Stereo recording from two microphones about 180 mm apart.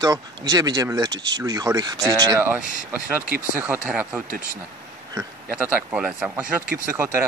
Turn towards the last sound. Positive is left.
turn(degrees=-15)  # may be behind; listen again after turning